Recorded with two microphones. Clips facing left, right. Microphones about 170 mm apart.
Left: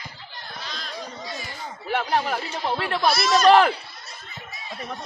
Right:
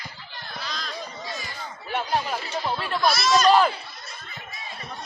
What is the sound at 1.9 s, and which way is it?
Speech, 70° left (ahead or behind).